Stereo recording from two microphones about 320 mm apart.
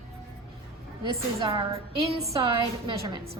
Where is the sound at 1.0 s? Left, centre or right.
Centre.